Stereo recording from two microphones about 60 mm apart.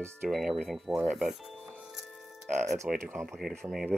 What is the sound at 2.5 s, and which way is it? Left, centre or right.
Speech, centre.